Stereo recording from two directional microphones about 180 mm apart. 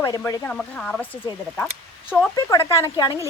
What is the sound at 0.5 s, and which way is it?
Speech, 5° left (ahead or behind).